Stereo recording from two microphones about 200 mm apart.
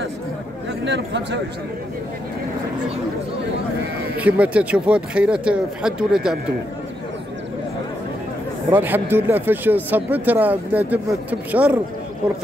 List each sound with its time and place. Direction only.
0.8 s speech: 60° right (ahead or behind)
4.2 s speech: 5° right (ahead or behind)
8.6 s speech: 10° right (ahead or behind)